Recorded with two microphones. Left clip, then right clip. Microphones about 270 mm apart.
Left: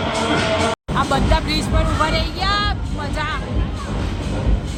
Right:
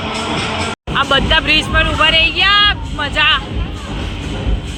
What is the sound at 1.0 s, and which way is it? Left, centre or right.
Speech, centre.